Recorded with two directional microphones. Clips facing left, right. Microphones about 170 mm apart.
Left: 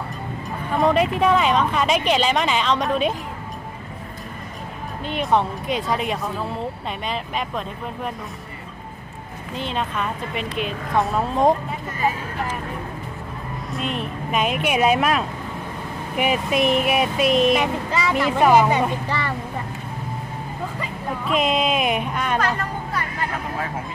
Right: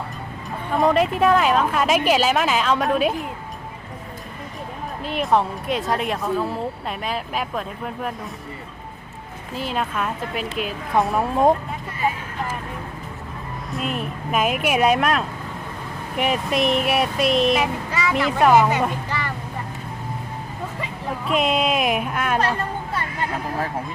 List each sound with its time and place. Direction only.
0.7 s speech: centre (ahead or behind)
5.0 s speech: centre (ahead or behind)
9.6 s speech: 5° right (ahead or behind)
13.7 s speech: centre (ahead or behind)
20.7 s speech: centre (ahead or behind)
22.4 s a sound: 30° right (ahead or behind)